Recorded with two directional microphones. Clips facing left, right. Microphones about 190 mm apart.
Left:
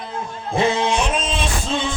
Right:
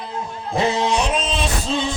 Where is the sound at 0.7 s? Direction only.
40° right (ahead or behind).